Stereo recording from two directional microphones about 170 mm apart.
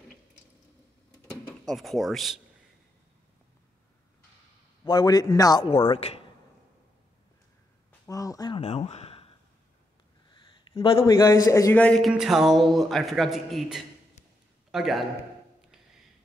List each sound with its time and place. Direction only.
1.7 s a man's voice: centre (ahead or behind)
4.8 s a man's voice: 25° left (ahead or behind)
5.9 s speech: 35° left (ahead or behind)
8.1 s a sound: 20° left (ahead or behind)
8.5 s a sound: 35° left (ahead or behind)
10.3 s a man's voice: 25° left (ahead or behind); by 15.0 s centre (ahead or behind)